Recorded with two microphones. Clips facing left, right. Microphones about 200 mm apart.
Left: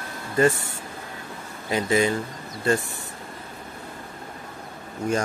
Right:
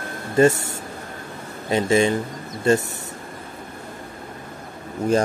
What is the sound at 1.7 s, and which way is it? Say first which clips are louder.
Speech: right 4 dB; 25° right (ahead or behind).